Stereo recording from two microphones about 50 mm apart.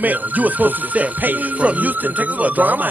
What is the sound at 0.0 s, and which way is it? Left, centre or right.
Speech, right.